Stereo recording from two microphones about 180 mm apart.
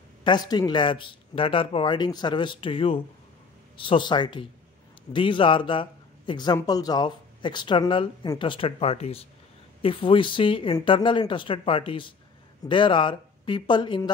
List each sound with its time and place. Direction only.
0.2 s speech: 25° left (ahead or behind)